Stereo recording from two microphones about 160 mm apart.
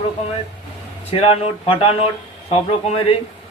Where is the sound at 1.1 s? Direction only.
35° left (ahead or behind).